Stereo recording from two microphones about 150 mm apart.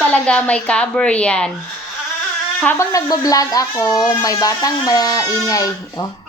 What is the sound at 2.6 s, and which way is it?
Speech, 20° left (ahead or behind).